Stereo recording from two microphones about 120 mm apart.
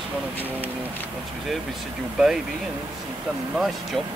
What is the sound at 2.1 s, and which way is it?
Speech, 5° right (ahead or behind).